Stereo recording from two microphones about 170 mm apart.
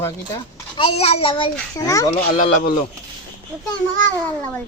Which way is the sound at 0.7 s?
35° left (ahead or behind).